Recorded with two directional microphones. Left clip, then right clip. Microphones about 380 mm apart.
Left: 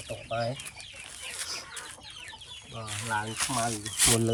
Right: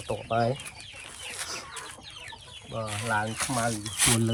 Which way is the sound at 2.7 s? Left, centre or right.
Centre.